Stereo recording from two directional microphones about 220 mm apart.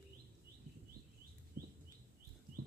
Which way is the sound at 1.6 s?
40° right (ahead or behind).